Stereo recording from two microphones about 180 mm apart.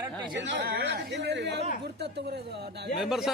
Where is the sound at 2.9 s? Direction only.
Centre (ahead or behind).